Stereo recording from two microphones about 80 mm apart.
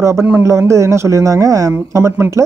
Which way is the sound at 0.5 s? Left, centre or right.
Right.